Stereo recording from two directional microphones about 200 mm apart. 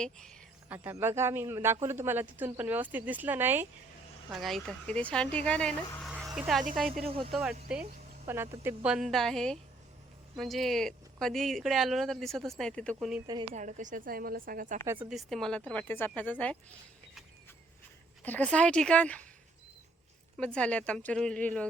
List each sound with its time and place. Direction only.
0.0 s speech: 5° left (ahead or behind)
0.7 s a man's voice: 10° right (ahead or behind)
7.0 s speech: 25° right (ahead or behind)
7.7 s speech: 5° right (ahead or behind)
13.5 s a woman's voice: 40° right (ahead or behind)
15.1 s speech: centre (ahead or behind)
18.2 s speech: 10° left (ahead or behind)
20.3 s speech: 5° left (ahead or behind)